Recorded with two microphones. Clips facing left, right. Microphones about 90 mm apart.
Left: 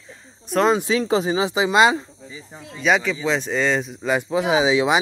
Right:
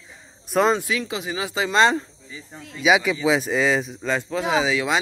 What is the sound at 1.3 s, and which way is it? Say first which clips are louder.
Speech: even; 20° left (ahead or behind).